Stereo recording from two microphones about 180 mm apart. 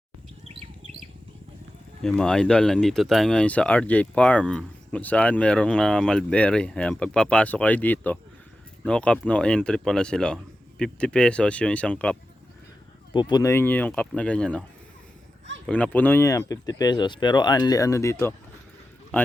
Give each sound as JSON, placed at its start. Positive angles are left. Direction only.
{"t": 2.0, "sound": "speech", "side_deg": 5}
{"t": 13.1, "sound": "speech", "side_deg": 25}
{"t": 15.6, "sound": "a man's voice", "side_deg": 5}